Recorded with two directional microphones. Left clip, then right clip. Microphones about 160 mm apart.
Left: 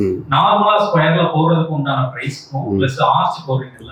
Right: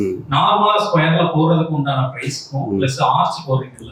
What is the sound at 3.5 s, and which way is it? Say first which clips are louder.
Speech: right 1 dB; 10° right (ahead or behind).